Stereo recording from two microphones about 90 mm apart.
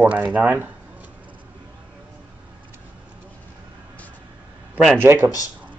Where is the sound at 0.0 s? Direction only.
15° right (ahead or behind).